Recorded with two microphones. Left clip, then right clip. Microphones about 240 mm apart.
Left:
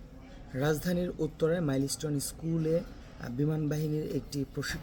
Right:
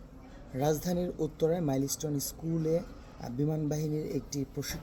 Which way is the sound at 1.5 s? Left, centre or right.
Right.